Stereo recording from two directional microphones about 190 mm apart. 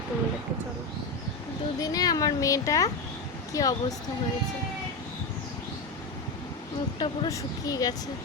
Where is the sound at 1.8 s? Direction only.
20° left (ahead or behind).